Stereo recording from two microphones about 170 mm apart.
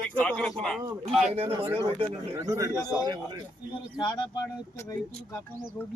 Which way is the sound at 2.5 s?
20° right (ahead or behind).